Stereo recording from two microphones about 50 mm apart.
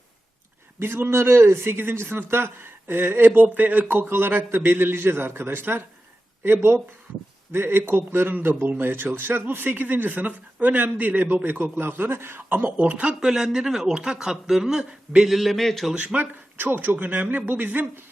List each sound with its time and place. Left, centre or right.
0.8 s a man's voice: right
12.5 s speech: right
13.1 s a man's voice: centre
16.1 s speech: right